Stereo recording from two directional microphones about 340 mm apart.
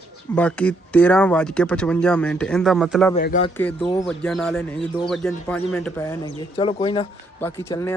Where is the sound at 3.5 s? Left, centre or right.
Centre.